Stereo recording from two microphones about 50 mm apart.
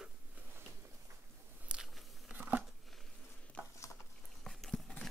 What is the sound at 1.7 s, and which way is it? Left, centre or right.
Biting, centre.